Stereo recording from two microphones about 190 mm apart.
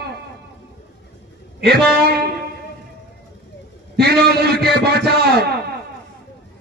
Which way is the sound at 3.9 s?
55° right (ahead or behind).